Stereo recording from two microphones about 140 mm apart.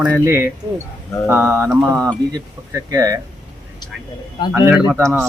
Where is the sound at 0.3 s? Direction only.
15° right (ahead or behind).